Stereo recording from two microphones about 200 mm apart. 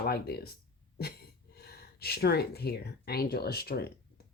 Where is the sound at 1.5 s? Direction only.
50° left (ahead or behind).